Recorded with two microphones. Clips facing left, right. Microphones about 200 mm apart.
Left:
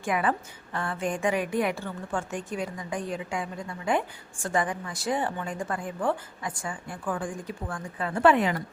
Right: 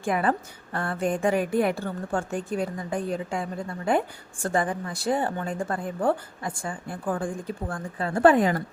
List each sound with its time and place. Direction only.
0.0 s a woman's voice: 35° right (ahead or behind)